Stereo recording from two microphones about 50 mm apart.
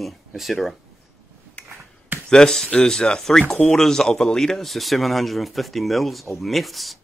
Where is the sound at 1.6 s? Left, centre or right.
Left.